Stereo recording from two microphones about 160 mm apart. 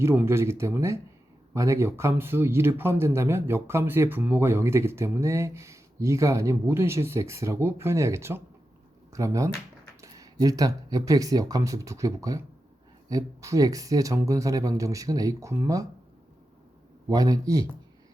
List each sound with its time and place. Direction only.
0.0 s speech: 15° right (ahead or behind)
17.1 s speech: 20° right (ahead or behind)